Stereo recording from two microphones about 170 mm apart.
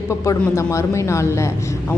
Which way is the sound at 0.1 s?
15° left (ahead or behind).